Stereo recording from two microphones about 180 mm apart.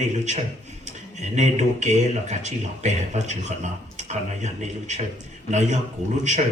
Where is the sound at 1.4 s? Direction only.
40° right (ahead or behind).